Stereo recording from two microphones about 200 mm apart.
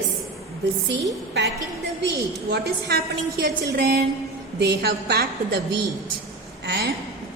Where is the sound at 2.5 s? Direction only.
50° right (ahead or behind).